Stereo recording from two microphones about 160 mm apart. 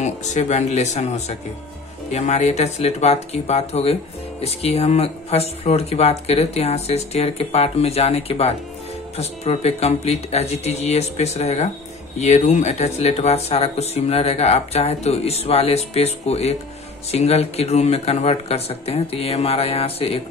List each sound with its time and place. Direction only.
0.0 s speech: 45° left (ahead or behind)